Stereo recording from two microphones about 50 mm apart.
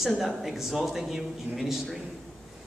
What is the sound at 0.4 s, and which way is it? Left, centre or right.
A man's voice, centre.